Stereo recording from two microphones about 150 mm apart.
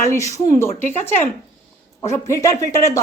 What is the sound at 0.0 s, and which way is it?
Speech, 20° left (ahead or behind).